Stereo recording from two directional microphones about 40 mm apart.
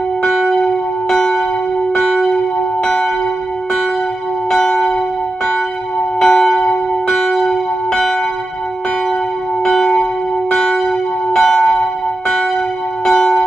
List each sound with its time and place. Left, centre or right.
0.2 s church bell: centre
4.5 s church bell: centre
6.1 s church bell: centre
10.5 s church bell: centre